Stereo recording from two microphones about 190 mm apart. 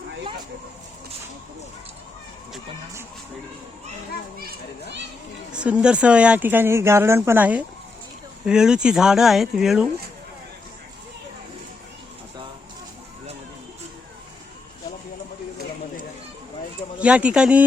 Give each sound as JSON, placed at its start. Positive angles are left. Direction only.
{"t": 4.4, "sound": "a child's voice", "side_deg": -60}
{"t": 5.5, "sound": "speech", "side_deg": -5}
{"t": 17.0, "sound": "speech", "side_deg": -5}